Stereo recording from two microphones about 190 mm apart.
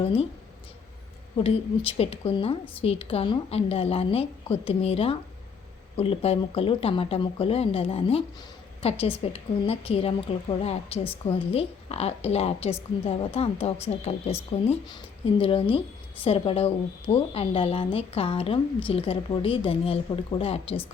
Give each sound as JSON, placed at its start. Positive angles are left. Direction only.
{"t": 0.0, "sound": "speech", "side_deg": 30}
{"t": 1.5, "sound": "speech", "side_deg": 30}